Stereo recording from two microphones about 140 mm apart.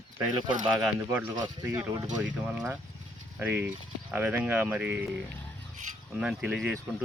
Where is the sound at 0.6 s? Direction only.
30° right (ahead or behind).